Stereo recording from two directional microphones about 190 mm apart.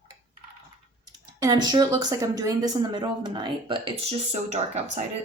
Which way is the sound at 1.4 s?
20° right (ahead or behind).